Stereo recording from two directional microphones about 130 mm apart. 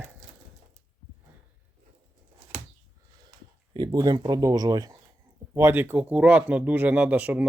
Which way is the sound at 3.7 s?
30° right (ahead or behind).